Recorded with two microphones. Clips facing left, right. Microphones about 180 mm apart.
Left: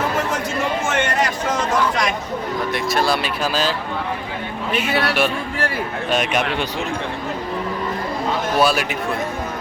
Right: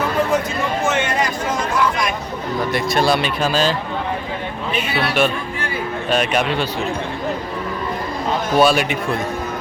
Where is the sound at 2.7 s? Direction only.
Centre (ahead or behind).